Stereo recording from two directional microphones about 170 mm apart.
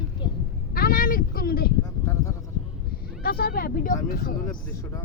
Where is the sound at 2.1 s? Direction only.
15° left (ahead or behind).